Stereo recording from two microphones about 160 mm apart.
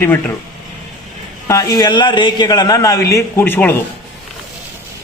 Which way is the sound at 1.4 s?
20° left (ahead or behind).